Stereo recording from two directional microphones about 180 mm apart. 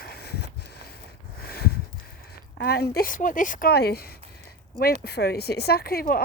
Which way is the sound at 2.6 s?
60° left (ahead or behind).